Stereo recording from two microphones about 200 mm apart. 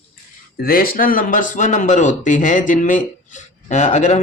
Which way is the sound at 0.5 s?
45° left (ahead or behind).